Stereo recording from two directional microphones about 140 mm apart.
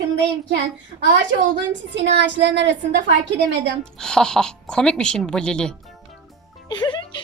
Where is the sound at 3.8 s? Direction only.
5° left (ahead or behind).